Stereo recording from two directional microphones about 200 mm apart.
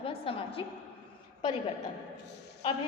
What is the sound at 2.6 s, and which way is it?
Speech, 25° left (ahead or behind).